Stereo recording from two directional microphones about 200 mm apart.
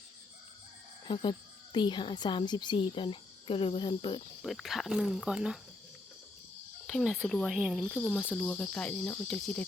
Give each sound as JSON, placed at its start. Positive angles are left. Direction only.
{"t": 1.0, "sound": "speech", "side_deg": 25}
{"t": 4.4, "sound": "speech", "side_deg": 0}
{"t": 6.8, "sound": "speech", "side_deg": 0}